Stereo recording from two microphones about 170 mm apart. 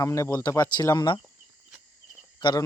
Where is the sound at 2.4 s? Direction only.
25° left (ahead or behind).